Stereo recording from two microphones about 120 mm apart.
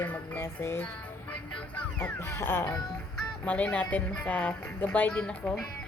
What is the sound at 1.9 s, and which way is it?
Speech, 20° left (ahead or behind).